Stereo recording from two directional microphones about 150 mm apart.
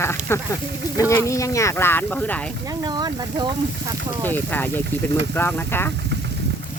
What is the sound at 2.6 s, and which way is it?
Speech, 25° right (ahead or behind).